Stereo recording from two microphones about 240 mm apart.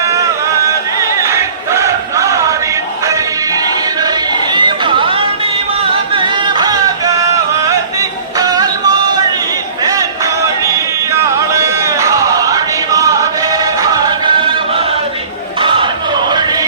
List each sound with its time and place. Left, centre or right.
0.6 s chant: centre
4.5 s chatter: centre
6.1 s music: centre
11.1 s music: centre
15.6 s a sound: right